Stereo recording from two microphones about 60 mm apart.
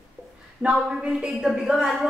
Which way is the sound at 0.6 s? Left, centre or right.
Centre.